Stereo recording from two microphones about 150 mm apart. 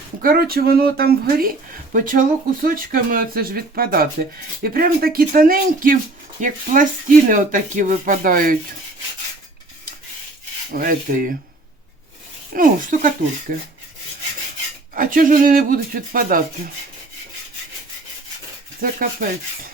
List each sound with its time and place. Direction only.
0.2 s speech: 80° right
6.4 s speech: 60° right (ahead or behind)
10.8 s speech: 70° right (ahead or behind)
12.5 s speech: 65° right (ahead or behind)
14.9 s speech: 65° right (ahead or behind)
18.8 s speech: 65° right (ahead or behind)